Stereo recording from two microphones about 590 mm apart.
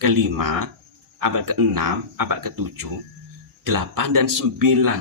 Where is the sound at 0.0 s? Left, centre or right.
Right.